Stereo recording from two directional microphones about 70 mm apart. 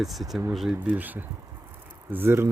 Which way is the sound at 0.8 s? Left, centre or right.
Right.